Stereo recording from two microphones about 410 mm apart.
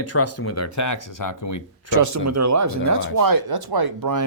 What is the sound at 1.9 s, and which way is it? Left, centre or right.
Speech, right.